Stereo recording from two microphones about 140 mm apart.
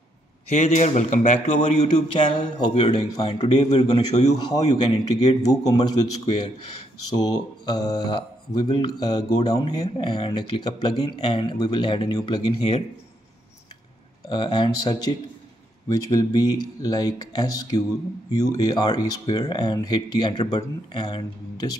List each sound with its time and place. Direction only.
0.5 s speech: 55° left (ahead or behind)
2.0 s speech: 35° left (ahead or behind)
9.9 s speech: 40° left (ahead or behind)
12.5 s a man's voice: 50° left (ahead or behind)
14.3 s speech: 35° left (ahead or behind)